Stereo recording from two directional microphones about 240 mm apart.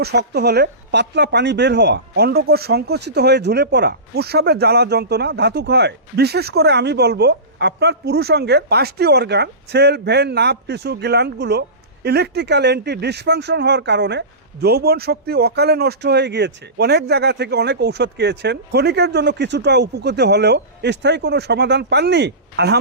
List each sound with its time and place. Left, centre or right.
0.0 s a woman's voice: right